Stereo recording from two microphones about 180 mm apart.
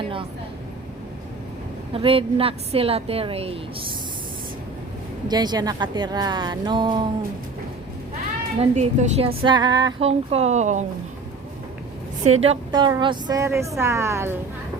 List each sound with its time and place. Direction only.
1.9 s a woman's voice: 30° right (ahead or behind)
5.3 s a woman's voice: 20° right (ahead or behind)
8.5 s a woman's voice: 40° right (ahead or behind); by 9.9 s 20° right (ahead or behind)
10.0 s a woman's voice: 35° right (ahead or behind)
12.3 s a woman's voice: 35° right (ahead or behind); by 14.3 s 15° right (ahead or behind)